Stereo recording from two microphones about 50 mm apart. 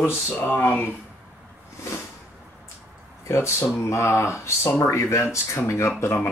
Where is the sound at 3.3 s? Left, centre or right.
Left.